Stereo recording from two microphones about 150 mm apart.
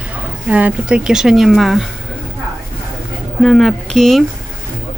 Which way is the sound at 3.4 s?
Centre (ahead or behind).